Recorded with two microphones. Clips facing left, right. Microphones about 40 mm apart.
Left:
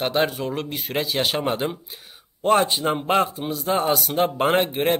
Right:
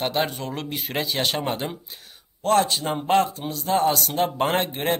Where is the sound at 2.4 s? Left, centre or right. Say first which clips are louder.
Left 2 dB; centre.